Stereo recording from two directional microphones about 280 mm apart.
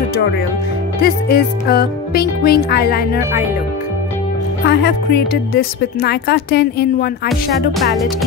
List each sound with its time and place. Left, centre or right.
1.0 s speech: left
4.6 s speech: left